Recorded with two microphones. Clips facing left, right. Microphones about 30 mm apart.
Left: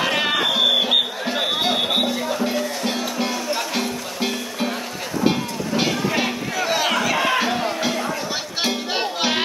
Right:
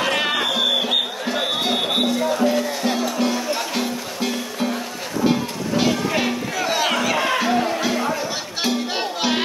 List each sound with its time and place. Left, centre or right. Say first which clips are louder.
0.0 s music: even; centre
4.2 s music: even; centre
5.8 s music: right 1 dB; centre
7.9 s music: right 2 dB; centre
8.6 s music: right 1 dB; centre